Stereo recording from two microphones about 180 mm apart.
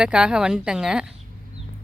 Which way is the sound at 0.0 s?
5° right (ahead or behind).